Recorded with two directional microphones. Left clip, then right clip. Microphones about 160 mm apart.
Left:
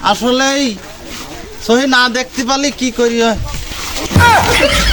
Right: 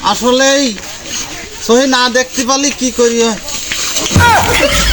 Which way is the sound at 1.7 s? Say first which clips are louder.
Right 1 dB; 15° left (ahead or behind).